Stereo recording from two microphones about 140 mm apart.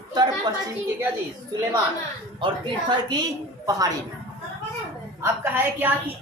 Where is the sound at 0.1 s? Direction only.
30° right (ahead or behind).